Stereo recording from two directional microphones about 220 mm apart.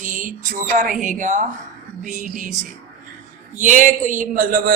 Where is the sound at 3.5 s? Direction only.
35° right (ahead or behind).